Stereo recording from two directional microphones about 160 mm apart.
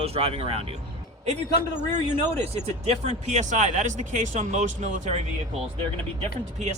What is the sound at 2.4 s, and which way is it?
Speech, 40° right (ahead or behind).